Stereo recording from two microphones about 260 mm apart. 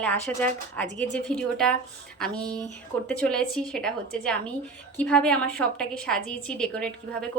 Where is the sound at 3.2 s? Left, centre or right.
Centre.